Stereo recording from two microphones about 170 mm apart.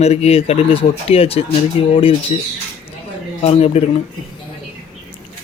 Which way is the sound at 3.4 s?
35° left (ahead or behind).